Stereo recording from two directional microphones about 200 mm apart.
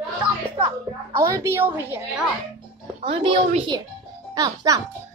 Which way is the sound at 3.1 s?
25° right (ahead or behind).